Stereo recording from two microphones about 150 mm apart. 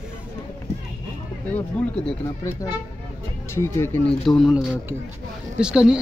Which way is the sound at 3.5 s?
15° left (ahead or behind).